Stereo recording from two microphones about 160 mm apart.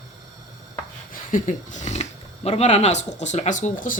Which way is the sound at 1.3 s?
50° left (ahead or behind).